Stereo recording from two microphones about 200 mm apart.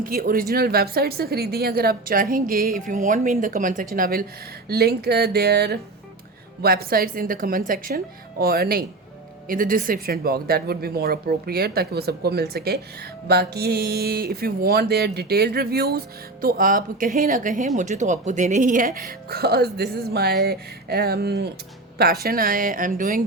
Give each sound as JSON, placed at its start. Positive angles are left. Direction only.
{"t": 0.0, "sound": "speech", "side_deg": -45}